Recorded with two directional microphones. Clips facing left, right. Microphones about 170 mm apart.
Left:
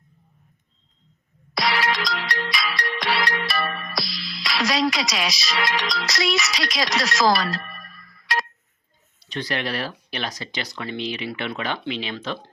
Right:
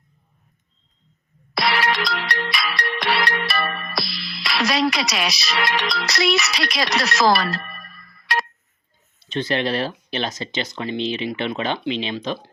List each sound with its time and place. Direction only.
1.5 s music: 60° right (ahead or behind)
9.2 s speech: 25° right (ahead or behind)